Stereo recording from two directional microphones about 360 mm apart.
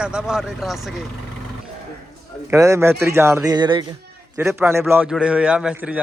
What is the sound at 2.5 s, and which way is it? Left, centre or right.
A man's voice, centre.